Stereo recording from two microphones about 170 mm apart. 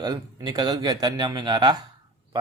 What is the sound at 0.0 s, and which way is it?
Speech, 25° right (ahead or behind).